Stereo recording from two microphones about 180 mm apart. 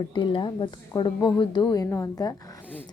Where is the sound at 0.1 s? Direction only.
25° left (ahead or behind).